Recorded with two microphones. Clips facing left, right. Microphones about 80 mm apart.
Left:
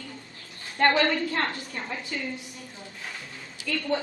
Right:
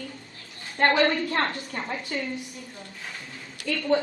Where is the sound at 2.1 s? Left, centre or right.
Right.